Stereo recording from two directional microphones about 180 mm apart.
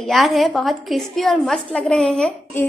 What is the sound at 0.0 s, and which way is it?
A woman's voice, centre (ahead or behind).